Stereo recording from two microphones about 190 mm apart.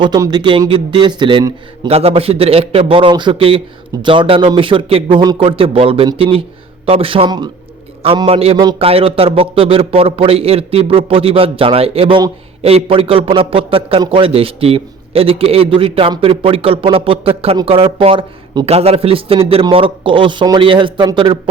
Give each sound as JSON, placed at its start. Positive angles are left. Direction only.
{"t": 0.0, "sound": "a man's voice", "side_deg": -20}